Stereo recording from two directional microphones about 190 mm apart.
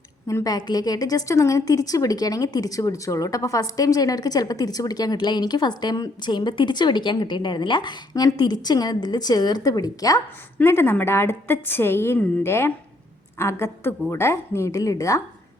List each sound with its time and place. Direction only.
0.3 s a woman's voice: 20° left (ahead or behind)